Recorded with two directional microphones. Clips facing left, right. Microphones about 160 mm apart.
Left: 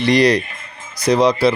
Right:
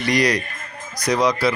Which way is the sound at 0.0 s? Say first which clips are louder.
Left 6 dB; 30° left (ahead or behind).